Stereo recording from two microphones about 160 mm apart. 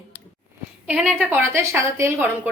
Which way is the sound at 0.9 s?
5° right (ahead or behind).